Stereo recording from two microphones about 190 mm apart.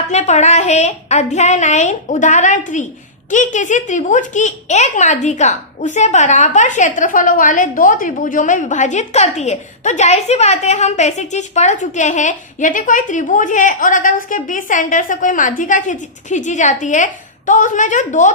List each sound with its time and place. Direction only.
0.1 s a woman's voice: 35° left (ahead or behind)